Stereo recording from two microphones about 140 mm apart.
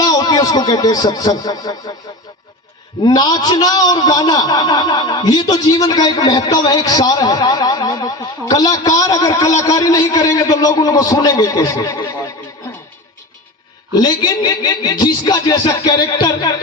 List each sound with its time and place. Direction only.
0.0 s speech: 25° left (ahead or behind)
3.0 s a man's voice: 30° left (ahead or behind)
13.9 s a man's voice: 30° left (ahead or behind)